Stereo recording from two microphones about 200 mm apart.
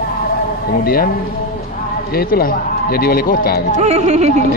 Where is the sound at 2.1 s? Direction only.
50° left (ahead or behind).